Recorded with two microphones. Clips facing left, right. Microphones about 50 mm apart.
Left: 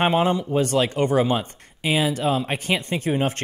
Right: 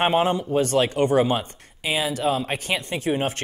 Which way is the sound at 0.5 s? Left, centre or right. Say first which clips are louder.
Even; left.